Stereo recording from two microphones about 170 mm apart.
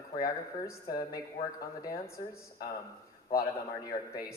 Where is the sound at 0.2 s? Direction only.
20° left (ahead or behind).